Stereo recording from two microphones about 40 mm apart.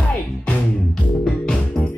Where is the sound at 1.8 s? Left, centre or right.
Centre.